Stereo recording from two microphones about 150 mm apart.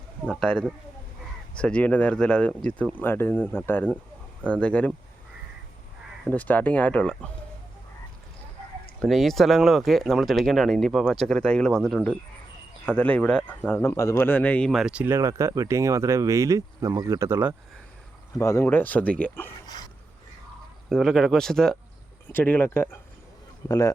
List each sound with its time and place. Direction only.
0.3 s speech: 5° left (ahead or behind)
6.3 s speech: 10° left (ahead or behind)
9.0 s speech: centre (ahead or behind); by 17.5 s 15° right (ahead or behind)
18.3 s speech: 20° left (ahead or behind)
20.9 s speech: centre (ahead or behind); by 23.9 s 25° left (ahead or behind)